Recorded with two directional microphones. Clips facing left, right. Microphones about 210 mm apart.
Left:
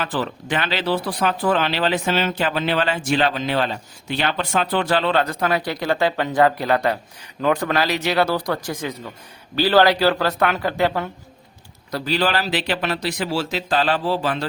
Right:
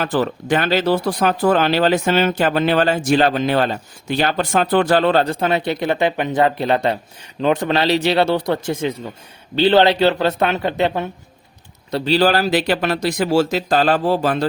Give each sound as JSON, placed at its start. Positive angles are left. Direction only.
{"t": 0.0, "sound": "speech", "side_deg": -45}
{"t": 5.2, "sound": "speech", "side_deg": -30}